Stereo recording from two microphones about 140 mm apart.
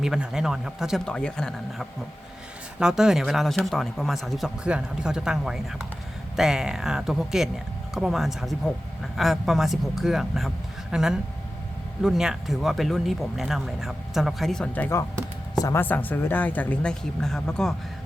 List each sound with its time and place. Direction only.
0.0 s speech: 5° right (ahead or behind)
15.5 s speech: 25° left (ahead or behind)
15.8 s speech: 15° left (ahead or behind)